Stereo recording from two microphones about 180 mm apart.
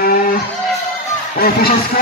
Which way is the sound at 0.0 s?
55° left (ahead or behind).